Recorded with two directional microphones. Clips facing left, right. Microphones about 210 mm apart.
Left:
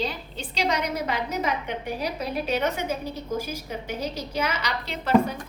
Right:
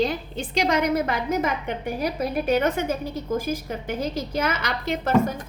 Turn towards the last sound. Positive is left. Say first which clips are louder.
# right 1 dB
turn(degrees=-50)  # may be behind; listen again after turning